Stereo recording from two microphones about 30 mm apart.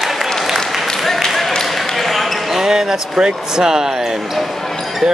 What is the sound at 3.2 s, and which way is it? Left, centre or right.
Speech, right.